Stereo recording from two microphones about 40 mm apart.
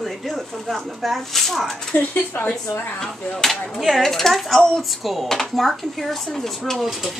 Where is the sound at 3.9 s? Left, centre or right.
Centre.